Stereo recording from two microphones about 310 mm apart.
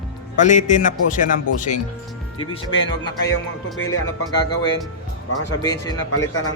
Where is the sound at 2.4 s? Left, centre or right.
Centre.